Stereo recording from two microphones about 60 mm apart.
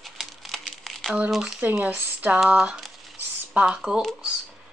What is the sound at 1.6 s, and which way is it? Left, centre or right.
Speech, right.